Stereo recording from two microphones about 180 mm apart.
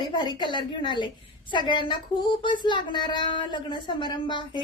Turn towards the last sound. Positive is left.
turn(degrees=25)  # may be behind; listen again after turning